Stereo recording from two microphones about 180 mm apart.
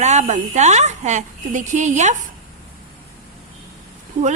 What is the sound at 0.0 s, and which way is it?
Speech, 40° right (ahead or behind).